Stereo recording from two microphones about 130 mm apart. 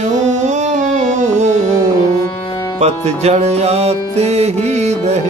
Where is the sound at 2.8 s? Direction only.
55° right (ahead or behind).